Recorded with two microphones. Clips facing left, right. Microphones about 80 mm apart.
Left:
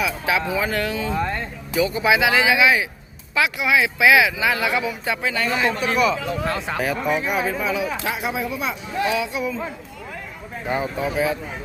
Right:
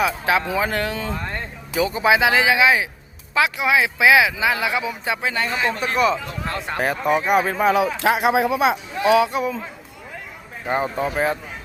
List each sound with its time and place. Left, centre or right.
0.0 s speech: right
8.0 s speech: right
9.3 s speech: right
10.7 s speech: right